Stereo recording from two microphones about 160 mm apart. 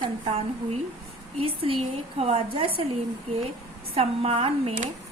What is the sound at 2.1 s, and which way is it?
Speech, 40° right (ahead or behind).